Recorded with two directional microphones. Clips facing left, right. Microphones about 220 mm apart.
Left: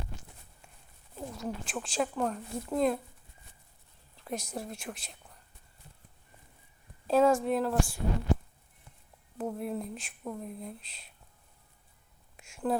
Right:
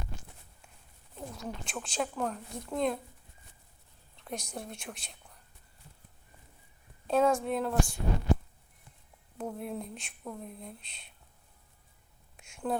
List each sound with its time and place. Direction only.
1.1 s speech: centre (ahead or behind)
4.1 s a woman's voice: centre (ahead or behind)
7.1 s speech: 5° left (ahead or behind)
9.4 s speech: centre (ahead or behind)
12.4 s a sound: 5° left (ahead or behind)